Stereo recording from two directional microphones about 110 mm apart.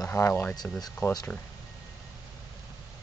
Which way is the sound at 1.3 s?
5° left (ahead or behind).